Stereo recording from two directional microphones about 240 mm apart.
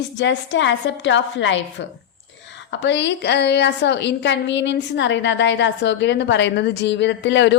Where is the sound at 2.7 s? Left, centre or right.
Left.